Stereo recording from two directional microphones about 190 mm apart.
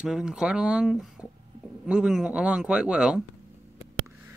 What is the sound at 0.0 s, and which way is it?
Speech, 5° right (ahead or behind).